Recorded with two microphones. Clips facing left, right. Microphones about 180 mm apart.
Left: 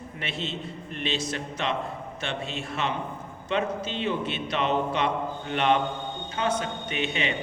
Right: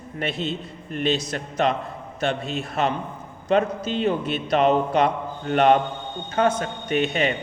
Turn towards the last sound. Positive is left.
turn(degrees=-45)  # may be behind; listen again after turning